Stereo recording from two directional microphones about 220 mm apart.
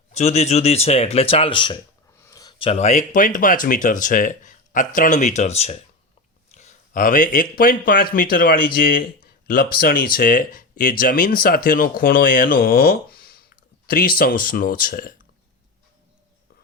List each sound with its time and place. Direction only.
0.1 s a man's voice: 30° left (ahead or behind)